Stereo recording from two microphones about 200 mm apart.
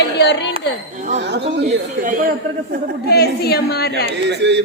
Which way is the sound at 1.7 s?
40° right (ahead or behind).